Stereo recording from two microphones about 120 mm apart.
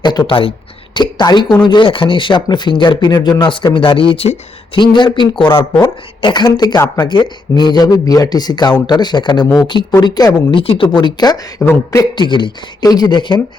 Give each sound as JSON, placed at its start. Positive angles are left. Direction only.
{"t": 0.0, "sound": "speech", "side_deg": 40}
{"t": 6.7, "sound": "speech", "side_deg": 20}
{"t": 7.0, "sound": "speech", "side_deg": 40}
{"t": 10.6, "sound": "speech", "side_deg": 50}
{"t": 10.8, "sound": "speech", "side_deg": 35}
{"t": 11.6, "sound": "a sound", "side_deg": 10}
{"t": 12.1, "sound": "speech", "side_deg": 40}